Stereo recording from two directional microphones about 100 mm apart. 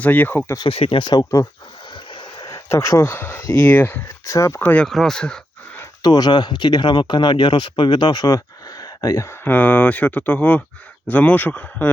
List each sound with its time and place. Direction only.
0.0 s speech: 15° left (ahead or behind)
0.7 s speech: 70° left (ahead or behind); by 1.2 s 55° left (ahead or behind)
1.2 s speech: 35° left (ahead or behind)
2.5 s a sound: 30° left (ahead or behind)
3.1 s speech: 20° left (ahead or behind)
4.3 s speech: 30° left (ahead or behind)
4.9 s speech: 5° left (ahead or behind)
6.0 s speech: 45° left (ahead or behind)
8.8 s a sound: 35° left (ahead or behind)
9.4 s speech: 15° left (ahead or behind)